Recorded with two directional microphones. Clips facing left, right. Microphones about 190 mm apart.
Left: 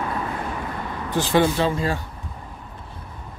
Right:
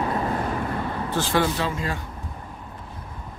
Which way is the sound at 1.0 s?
15° left (ahead or behind).